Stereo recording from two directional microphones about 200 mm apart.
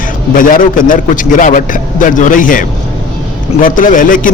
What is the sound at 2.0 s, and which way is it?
Speech, 40° left (ahead or behind).